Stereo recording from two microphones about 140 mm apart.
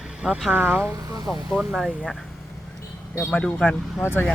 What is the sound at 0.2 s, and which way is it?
Speech, 5° right (ahead or behind).